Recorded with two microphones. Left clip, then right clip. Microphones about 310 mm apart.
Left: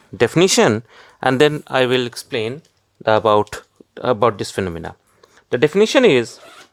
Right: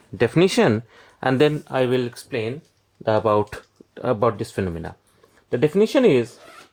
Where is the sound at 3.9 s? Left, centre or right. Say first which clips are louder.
Left 4 dB; left.